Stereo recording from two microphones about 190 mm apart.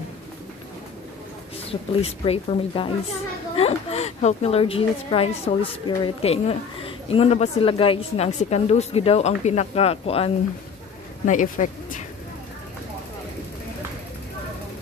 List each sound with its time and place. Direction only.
1.7 s a woman's voice: 30° left (ahead or behind)
11.2 s speech: 45° left (ahead or behind)